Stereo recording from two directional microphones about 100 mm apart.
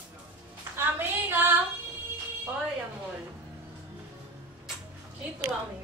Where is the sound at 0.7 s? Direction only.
20° right (ahead or behind).